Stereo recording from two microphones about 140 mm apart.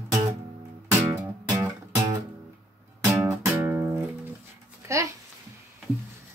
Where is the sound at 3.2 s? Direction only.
20° right (ahead or behind).